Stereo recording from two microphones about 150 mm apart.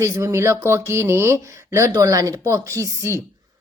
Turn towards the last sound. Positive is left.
turn(degrees=-20)  # may be behind; listen again after turning